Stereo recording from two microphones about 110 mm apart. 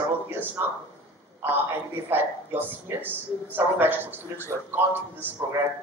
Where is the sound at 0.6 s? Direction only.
20° right (ahead or behind).